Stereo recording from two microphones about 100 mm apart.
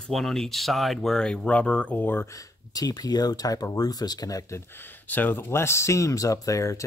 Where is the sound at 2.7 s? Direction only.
40° left (ahead or behind).